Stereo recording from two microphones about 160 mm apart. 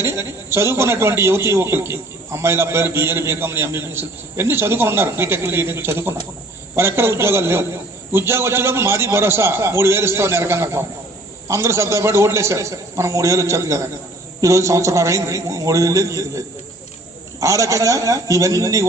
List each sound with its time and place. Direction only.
0.0 s a man's voice: 15° right (ahead or behind)
17.4 s a man's voice: 20° right (ahead or behind)